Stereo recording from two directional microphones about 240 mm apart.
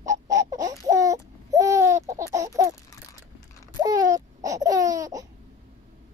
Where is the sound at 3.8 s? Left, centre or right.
Centre.